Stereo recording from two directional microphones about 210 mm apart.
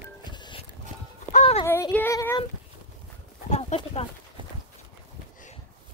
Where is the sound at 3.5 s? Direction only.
30° left (ahead or behind).